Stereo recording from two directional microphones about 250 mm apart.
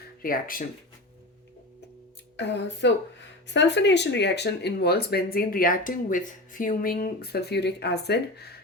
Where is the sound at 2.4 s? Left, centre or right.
Left.